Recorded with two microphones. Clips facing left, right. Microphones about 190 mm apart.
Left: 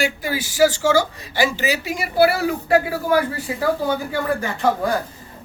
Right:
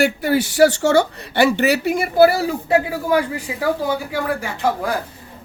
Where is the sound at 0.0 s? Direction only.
60° right (ahead or behind); by 2.4 s 45° right (ahead or behind).